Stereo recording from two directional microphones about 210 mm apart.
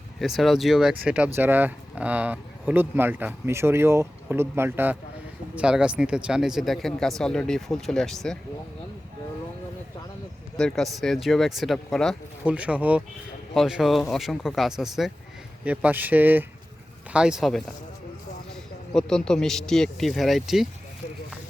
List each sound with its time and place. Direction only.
0.2 s speech: centre (ahead or behind)
10.6 s speech: centre (ahead or behind)
18.9 s speech: 5° left (ahead or behind)